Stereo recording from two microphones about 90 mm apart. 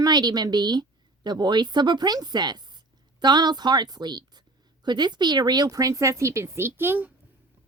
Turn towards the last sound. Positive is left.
turn(degrees=-20)  # may be behind; listen again after turning